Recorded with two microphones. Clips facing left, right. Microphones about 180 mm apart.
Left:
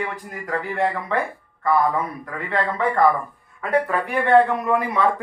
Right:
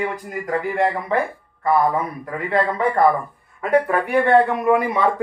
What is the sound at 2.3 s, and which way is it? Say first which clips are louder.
A man's voice: right 5 dB; 10° right (ahead or behind).